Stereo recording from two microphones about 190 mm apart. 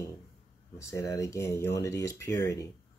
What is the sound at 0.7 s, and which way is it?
Speech, 15° left (ahead or behind).